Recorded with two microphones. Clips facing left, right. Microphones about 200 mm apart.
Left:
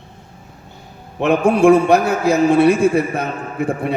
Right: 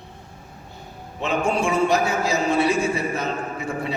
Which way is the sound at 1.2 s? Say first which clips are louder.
Left 10 dB; 60° left (ahead or behind).